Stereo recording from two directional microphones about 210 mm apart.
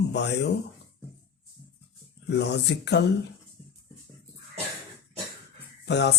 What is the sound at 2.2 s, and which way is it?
Speech, 55° left (ahead or behind).